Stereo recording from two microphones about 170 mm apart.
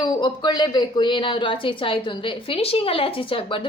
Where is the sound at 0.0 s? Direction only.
25° left (ahead or behind).